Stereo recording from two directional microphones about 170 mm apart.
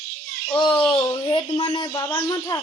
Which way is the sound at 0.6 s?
30° left (ahead or behind).